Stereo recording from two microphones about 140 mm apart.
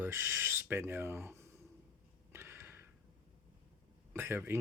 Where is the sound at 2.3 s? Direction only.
15° right (ahead or behind).